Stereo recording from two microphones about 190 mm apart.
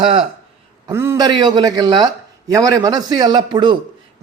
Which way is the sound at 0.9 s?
15° right (ahead or behind).